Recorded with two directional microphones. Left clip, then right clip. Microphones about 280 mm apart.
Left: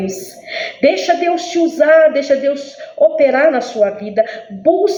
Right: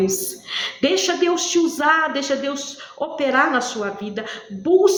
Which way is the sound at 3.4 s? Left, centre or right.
Centre.